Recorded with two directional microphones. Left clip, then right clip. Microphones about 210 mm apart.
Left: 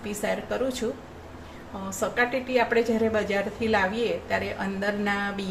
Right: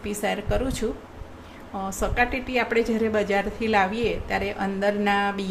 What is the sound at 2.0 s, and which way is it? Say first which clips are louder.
A woman's voice: even; 25° right (ahead or behind).